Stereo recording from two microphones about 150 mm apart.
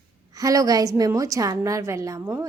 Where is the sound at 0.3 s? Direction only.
25° right (ahead or behind).